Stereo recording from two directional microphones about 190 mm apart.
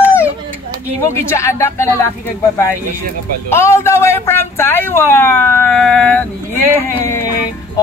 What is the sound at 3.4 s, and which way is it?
A man's voice, 15° left (ahead or behind).